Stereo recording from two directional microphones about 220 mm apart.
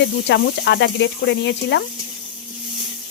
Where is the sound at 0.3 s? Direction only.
50° left (ahead or behind).